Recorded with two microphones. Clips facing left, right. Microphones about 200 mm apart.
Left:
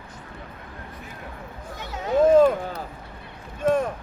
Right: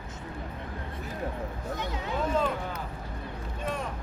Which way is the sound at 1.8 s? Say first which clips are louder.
Left 12 dB; 45° left (ahead or behind).